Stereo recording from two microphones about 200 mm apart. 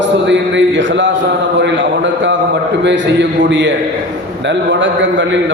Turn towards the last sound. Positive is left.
turn(degrees=-65)  # may be behind; listen again after turning